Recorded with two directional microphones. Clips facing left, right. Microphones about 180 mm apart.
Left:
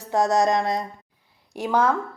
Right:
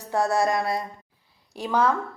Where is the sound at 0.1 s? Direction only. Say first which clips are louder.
Left 3 dB; 15° left (ahead or behind).